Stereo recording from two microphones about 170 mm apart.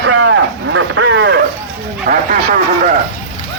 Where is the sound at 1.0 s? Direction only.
90° right.